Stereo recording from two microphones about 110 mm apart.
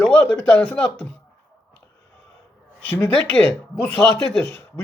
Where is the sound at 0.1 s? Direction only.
15° left (ahead or behind).